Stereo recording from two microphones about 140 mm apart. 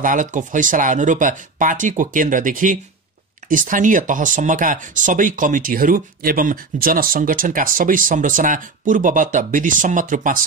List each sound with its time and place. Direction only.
0.0 s speech: 70° right (ahead or behind)